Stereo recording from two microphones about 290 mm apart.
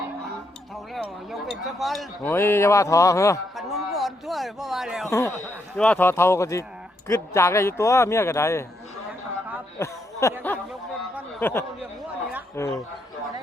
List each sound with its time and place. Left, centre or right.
0.9 s speech: centre
3.5 s speech: centre
9.7 s a sound: centre
10.4 s speech: centre